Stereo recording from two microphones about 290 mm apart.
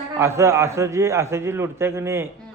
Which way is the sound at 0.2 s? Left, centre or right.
Centre.